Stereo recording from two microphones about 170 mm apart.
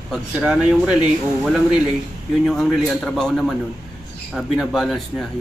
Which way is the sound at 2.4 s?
Centre (ahead or behind).